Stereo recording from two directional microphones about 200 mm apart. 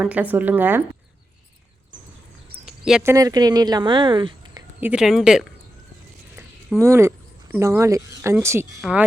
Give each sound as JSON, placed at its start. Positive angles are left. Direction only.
{"t": 0.0, "sound": "speech", "side_deg": -5}
{"t": 2.6, "sound": "a sound", "side_deg": 0}
{"t": 3.0, "sound": "a woman's voice", "side_deg": -15}
{"t": 4.8, "sound": "speech", "side_deg": -5}
{"t": 6.3, "sound": "a sound", "side_deg": -10}
{"t": 7.5, "sound": "speech", "side_deg": -10}